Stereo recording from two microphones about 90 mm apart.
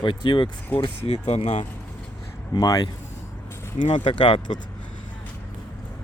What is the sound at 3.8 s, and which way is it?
Speech, 65° left (ahead or behind).